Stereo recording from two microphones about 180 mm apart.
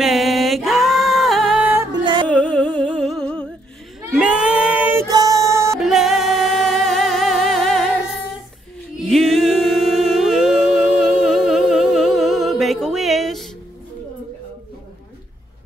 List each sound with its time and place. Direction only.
0.0 s music: centre (ahead or behind)
1.9 s music: 25° right (ahead or behind)
2.2 s music: 5° left (ahead or behind)
2.9 s a sound: centre (ahead or behind)
4.1 s child singing: 5° right (ahead or behind)
5.1 s music: 20° right (ahead or behind)
5.8 s music: centre (ahead or behind)
8.9 s humming: centre (ahead or behind)